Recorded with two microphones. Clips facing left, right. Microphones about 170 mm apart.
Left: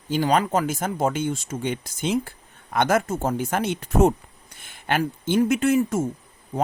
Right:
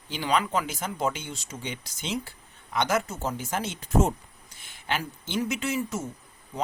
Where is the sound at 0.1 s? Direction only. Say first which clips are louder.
Left 6 dB; 45° left (ahead or behind).